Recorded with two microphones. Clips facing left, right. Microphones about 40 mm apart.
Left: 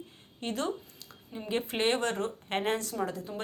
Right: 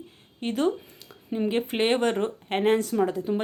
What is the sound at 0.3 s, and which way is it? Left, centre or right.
Speech, centre.